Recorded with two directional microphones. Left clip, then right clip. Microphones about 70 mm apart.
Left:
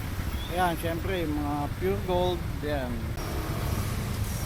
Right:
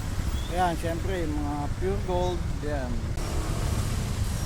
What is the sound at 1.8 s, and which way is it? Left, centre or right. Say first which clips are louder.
Speech: left 1 dB; left.